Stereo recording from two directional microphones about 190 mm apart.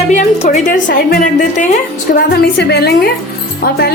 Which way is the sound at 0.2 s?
40° left (ahead or behind).